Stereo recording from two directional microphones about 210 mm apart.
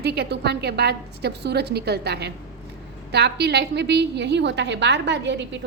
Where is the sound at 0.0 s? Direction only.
50° right (ahead or behind).